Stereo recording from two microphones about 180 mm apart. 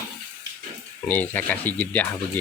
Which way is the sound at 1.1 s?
10° left (ahead or behind).